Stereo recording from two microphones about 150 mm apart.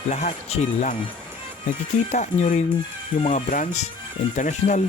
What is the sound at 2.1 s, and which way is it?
Speech, 55° left (ahead or behind).